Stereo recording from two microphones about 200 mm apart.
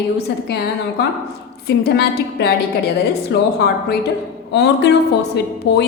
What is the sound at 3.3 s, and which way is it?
A woman's voice, 55° left (ahead or behind).